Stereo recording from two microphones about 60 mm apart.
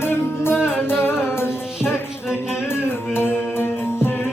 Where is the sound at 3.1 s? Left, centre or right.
Left.